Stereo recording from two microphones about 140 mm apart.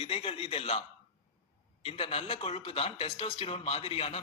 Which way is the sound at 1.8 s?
45° left (ahead or behind).